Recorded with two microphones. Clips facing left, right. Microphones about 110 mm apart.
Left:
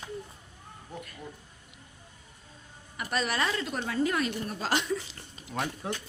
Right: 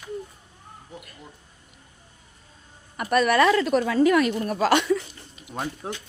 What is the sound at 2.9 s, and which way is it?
A woman's voice, 55° right (ahead or behind).